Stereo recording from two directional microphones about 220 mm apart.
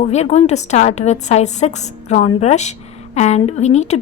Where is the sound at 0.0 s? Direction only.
30° left (ahead or behind).